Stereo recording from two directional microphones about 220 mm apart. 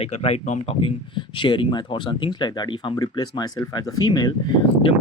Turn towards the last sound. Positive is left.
turn(degrees=20)  # may be behind; listen again after turning